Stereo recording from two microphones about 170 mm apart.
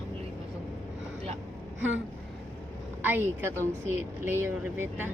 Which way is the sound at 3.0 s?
10° right (ahead or behind).